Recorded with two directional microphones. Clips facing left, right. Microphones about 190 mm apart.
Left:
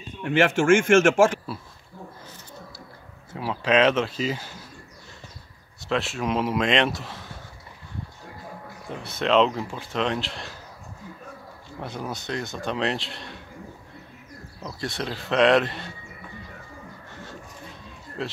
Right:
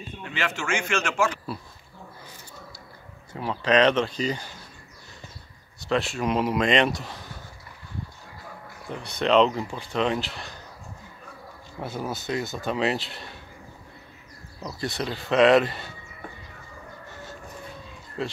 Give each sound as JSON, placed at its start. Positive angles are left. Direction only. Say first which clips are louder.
{"t": 0.2, "sound": "a man's voice", "louder": "left 11 dB", "side_deg": 50}
{"t": 3.3, "sound": "speech", "louder": "even", "side_deg": 5}
{"t": 5.9, "sound": "speech", "louder": "right 1 dB", "side_deg": 0}
{"t": 8.8, "sound": "speech", "louder": "right 1 dB", "side_deg": 0}
{"t": 11.8, "sound": "speech", "louder": "right 2 dB", "side_deg": -5}
{"t": 14.6, "sound": "speech", "louder": "right 1 dB", "side_deg": 0}
{"t": 17.1, "sound": "music", "louder": "left 1 dB", "side_deg": 0}
{"t": 18.2, "sound": "speech", "louder": "right 1 dB", "side_deg": 0}